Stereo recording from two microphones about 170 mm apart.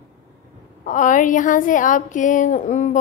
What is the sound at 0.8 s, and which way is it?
A woman's voice, 50° left (ahead or behind).